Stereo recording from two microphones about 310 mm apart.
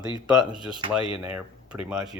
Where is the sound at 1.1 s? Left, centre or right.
Centre.